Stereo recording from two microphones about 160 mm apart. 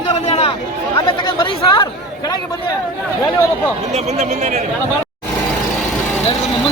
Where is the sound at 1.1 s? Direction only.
30° left (ahead or behind).